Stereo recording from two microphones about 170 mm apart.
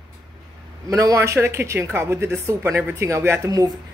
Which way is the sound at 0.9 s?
20° right (ahead or behind).